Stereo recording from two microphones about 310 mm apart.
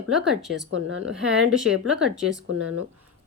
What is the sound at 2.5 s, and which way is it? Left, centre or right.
Speech, right.